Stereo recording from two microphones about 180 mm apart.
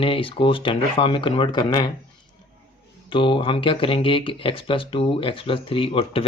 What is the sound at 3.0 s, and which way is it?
Speech, 30° left (ahead or behind).